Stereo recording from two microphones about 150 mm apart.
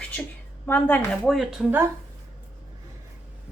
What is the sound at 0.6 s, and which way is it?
Speech, 10° left (ahead or behind).